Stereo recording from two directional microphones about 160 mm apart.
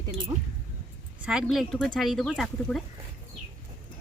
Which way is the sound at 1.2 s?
5° right (ahead or behind).